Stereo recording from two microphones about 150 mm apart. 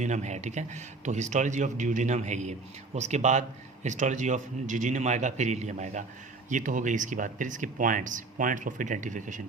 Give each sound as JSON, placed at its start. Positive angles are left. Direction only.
{"t": 0.0, "sound": "speech", "side_deg": -50}